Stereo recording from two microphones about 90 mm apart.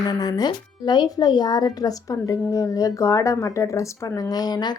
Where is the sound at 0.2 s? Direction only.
45° left (ahead or behind).